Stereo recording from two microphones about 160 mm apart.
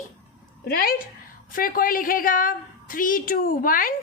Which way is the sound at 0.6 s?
70° left (ahead or behind).